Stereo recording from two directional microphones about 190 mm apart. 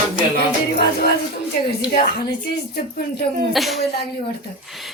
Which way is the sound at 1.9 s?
55° left (ahead or behind).